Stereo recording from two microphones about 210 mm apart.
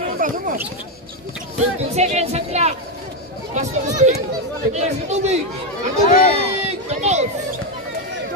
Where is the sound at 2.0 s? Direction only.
30° right (ahead or behind).